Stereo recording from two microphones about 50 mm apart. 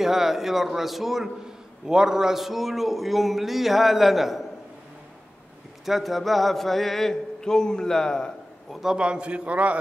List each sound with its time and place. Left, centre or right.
0.0 s a man's voice: centre
5.9 s a man's voice: centre
8.8 s a man's voice: centre